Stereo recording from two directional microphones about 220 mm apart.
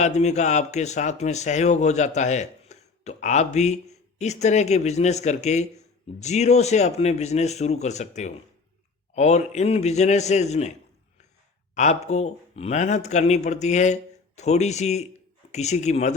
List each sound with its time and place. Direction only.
0.0 s speech: 30° left (ahead or behind)
11.7 s speech: 30° left (ahead or behind)